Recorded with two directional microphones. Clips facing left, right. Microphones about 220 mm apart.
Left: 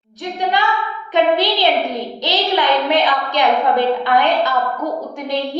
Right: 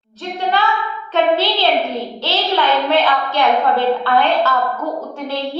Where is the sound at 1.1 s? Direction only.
15° left (ahead or behind).